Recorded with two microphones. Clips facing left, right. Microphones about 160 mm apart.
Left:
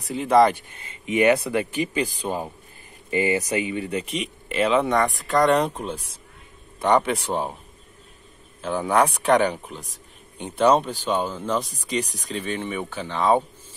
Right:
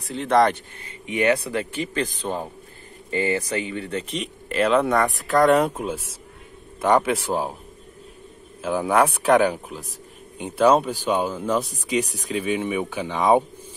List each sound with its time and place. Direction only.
0.1 s speech: 5° left (ahead or behind)
0.7 s speech: 20° left (ahead or behind)
4.0 s speech: centre (ahead or behind)
8.6 s speech: 5° right (ahead or behind)